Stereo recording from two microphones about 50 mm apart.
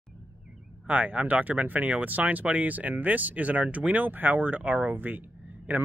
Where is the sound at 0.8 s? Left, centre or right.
Right.